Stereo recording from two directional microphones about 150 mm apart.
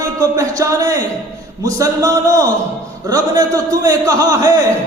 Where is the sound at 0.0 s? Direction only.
20° right (ahead or behind).